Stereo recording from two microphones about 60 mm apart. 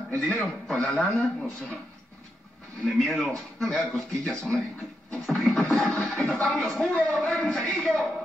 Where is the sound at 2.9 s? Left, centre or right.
Centre.